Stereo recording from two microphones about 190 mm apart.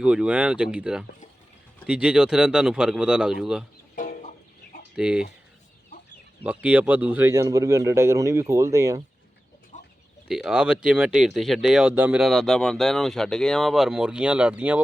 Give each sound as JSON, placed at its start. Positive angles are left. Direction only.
{"t": 0.0, "sound": "speech", "side_deg": -5}
{"t": 3.9, "sound": "chicken", "side_deg": 45}
{"t": 4.9, "sound": "speech", "side_deg": -5}
{"t": 6.4, "sound": "speech", "side_deg": -5}
{"t": 9.7, "sound": "pig", "side_deg": 40}
{"t": 10.2, "sound": "speech", "side_deg": -5}